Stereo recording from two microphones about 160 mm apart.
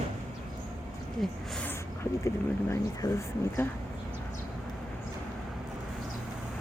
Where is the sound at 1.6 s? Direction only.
15° left (ahead or behind).